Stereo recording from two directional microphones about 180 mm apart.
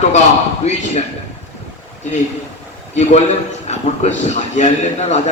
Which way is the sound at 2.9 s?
35° left (ahead or behind).